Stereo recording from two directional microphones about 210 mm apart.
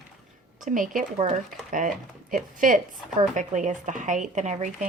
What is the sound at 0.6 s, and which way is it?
Speech, 40° right (ahead or behind).